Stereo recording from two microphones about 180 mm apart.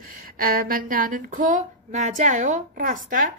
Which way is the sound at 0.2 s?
55° right (ahead or behind).